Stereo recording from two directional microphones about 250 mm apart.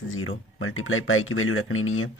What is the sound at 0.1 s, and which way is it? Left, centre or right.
Speech, left.